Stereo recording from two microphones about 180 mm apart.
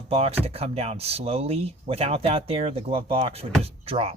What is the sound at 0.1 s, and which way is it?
Speech, 35° right (ahead or behind).